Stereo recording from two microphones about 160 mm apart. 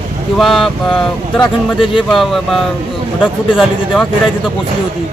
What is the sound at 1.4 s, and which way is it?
Speech, 30° left (ahead or behind).